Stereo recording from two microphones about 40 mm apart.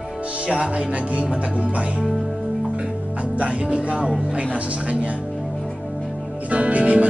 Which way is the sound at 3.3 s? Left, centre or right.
Right.